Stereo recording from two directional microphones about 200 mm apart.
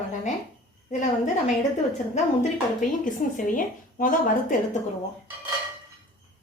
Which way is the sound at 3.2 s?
40° left (ahead or behind).